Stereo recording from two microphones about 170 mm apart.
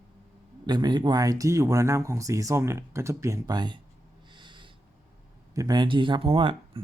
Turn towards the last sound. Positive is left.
turn(degrees=-30)  # may be behind; listen again after turning